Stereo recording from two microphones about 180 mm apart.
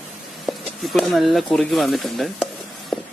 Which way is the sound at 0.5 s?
Centre (ahead or behind).